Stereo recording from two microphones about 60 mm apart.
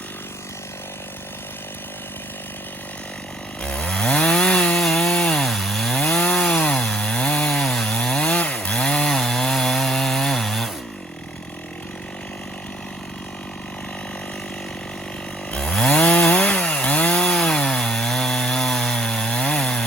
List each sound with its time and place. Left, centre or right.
3.6 s chainsaw: centre
4.8 s chainsaw: centre
5.5 s chainsaw: centre
6.1 s chainsaw: centre
15.5 s chainsaw: centre